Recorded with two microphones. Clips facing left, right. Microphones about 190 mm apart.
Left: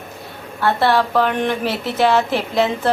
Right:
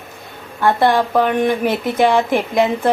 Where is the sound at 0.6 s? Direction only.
15° right (ahead or behind).